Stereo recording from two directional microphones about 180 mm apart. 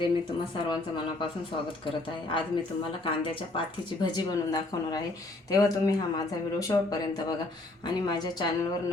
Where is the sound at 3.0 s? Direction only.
30° left (ahead or behind).